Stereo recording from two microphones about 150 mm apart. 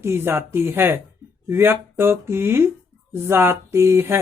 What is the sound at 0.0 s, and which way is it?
Speech, 15° right (ahead or behind).